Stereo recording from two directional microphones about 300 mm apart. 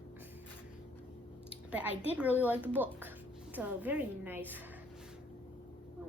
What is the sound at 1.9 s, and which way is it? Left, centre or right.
Speech, centre.